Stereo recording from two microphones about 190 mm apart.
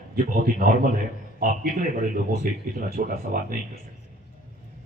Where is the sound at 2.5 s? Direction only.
45° right (ahead or behind).